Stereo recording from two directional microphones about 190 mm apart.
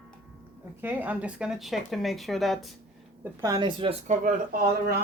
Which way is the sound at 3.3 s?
20° right (ahead or behind).